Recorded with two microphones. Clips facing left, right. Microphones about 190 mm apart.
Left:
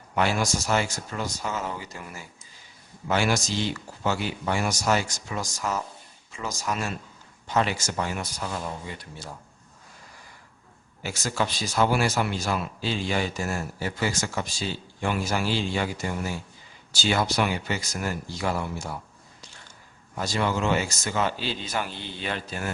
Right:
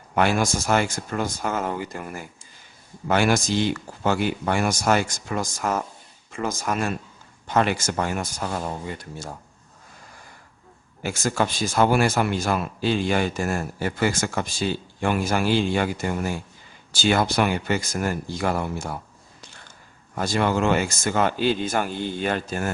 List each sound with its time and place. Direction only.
0.2 s speech: 55° right (ahead or behind)
11.0 s speech: 50° right (ahead or behind)
20.1 s speech: 55° right (ahead or behind)